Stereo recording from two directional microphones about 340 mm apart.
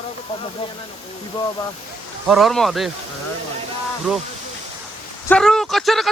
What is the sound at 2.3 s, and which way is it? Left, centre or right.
Speech, centre.